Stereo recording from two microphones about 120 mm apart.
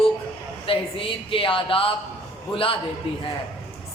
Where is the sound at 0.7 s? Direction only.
50° left (ahead or behind).